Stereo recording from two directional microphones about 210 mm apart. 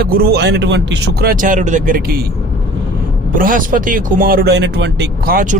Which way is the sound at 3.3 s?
40° right (ahead or behind).